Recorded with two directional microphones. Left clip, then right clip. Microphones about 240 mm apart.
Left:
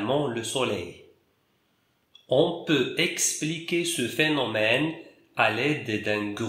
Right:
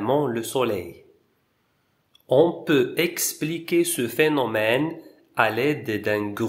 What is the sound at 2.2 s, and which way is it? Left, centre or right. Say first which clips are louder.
Speech: right 4 dB; right.